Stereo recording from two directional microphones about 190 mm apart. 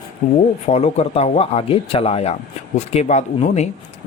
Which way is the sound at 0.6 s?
35° left (ahead or behind).